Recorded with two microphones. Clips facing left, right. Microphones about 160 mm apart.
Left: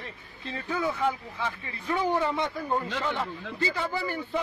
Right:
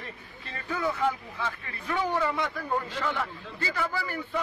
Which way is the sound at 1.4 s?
20° left (ahead or behind).